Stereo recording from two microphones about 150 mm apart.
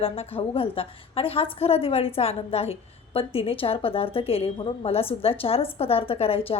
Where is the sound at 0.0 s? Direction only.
40° left (ahead or behind).